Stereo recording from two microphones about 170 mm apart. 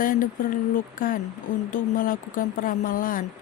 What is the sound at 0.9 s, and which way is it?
Mantra, 55° left (ahead or behind).